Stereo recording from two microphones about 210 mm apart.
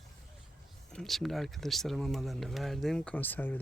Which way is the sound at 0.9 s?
Centre (ahead or behind).